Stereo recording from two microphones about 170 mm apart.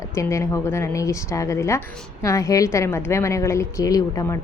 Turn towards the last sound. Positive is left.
turn(degrees=20)  # may be behind; listen again after turning